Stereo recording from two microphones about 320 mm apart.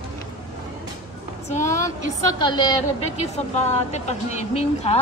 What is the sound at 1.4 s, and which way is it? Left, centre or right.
Speech, left.